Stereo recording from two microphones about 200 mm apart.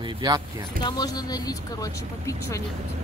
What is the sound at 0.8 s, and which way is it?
Speech, 20° left (ahead or behind).